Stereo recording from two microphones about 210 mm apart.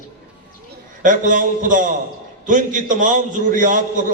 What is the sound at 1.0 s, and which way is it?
A man's voice, 40° right (ahead or behind).